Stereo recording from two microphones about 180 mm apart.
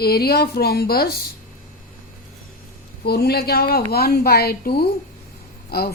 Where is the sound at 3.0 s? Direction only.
60° left (ahead or behind).